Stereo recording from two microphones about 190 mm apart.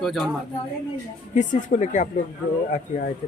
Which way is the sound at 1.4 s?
40° left (ahead or behind).